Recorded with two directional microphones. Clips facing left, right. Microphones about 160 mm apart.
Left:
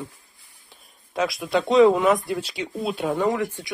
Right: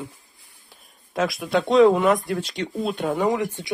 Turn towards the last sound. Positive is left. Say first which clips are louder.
# right 1 dB
turn(degrees=-20)  # may be behind; listen again after turning